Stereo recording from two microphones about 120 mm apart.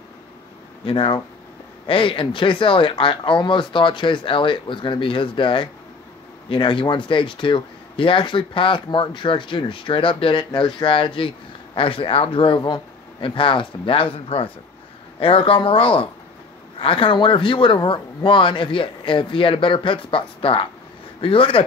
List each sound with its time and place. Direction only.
0.8 s speech: 45° left (ahead or behind)